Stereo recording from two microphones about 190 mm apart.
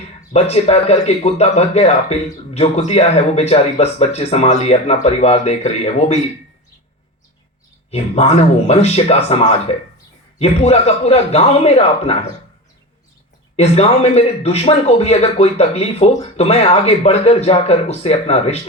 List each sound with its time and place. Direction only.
0.3 s speech: 35° left (ahead or behind)
7.9 s speech: 35° left (ahead or behind)
13.6 s speech: 35° left (ahead or behind)